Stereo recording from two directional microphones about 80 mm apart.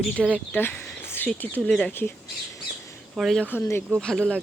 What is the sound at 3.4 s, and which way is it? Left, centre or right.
Speech, centre.